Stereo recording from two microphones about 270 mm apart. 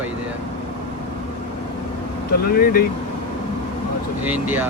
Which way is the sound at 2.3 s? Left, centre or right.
Left.